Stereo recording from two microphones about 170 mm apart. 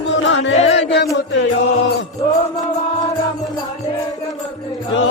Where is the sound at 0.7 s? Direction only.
90° left.